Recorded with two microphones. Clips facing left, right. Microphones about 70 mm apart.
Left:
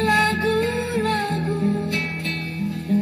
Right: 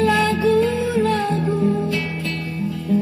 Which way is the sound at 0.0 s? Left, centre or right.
Left.